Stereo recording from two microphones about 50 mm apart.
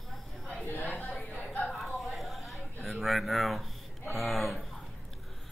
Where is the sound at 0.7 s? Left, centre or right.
Left.